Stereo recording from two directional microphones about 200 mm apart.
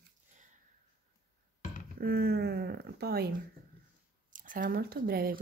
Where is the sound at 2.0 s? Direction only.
50° right (ahead or behind).